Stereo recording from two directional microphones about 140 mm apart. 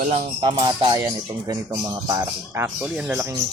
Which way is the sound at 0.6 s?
35° right (ahead or behind).